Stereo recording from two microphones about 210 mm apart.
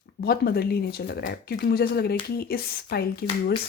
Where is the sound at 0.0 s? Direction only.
50° left (ahead or behind).